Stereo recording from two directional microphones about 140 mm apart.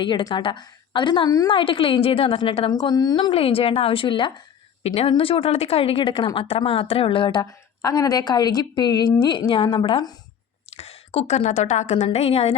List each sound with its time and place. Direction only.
0.0 s a woman's voice: 35° left (ahead or behind)
3.3 s a woman's voice: 45° left (ahead or behind)
7.8 s a woman's voice: 25° left (ahead or behind)
10.7 s a woman's voice: 45° left (ahead or behind)